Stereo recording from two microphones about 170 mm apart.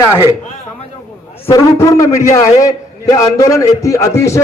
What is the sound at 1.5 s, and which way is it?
A man's voice, 20° left (ahead or behind).